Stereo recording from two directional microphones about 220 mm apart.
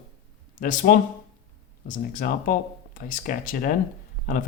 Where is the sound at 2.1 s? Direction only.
40° left (ahead or behind).